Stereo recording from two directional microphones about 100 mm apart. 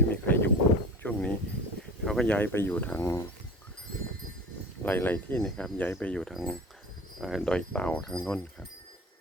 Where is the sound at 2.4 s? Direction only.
20° left (ahead or behind).